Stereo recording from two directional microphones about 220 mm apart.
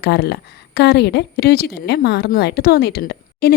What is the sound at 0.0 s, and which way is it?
A woman's voice, 50° left (ahead or behind).